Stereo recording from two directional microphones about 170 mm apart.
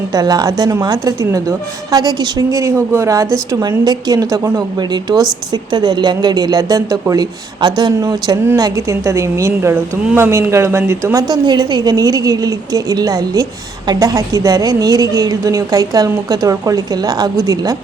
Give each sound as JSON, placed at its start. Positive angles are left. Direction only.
{"t": 0.1, "sound": "a woman's voice", "side_deg": -20}